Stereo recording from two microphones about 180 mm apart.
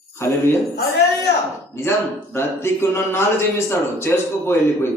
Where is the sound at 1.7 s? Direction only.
15° left (ahead or behind).